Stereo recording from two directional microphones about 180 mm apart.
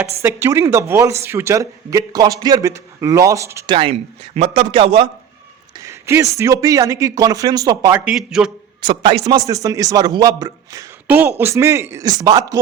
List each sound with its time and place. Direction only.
0.2 s a man's voice: 15° right (ahead or behind)
4.4 s a man's voice: 35° right (ahead or behind)
5.7 s a man's voice: 15° right (ahead or behind)
8.8 s speech: 25° right (ahead or behind)